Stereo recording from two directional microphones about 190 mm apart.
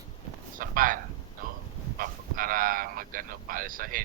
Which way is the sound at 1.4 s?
45° right (ahead or behind).